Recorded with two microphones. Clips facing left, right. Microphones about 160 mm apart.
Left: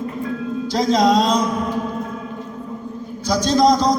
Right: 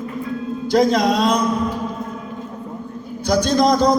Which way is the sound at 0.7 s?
60° right (ahead or behind).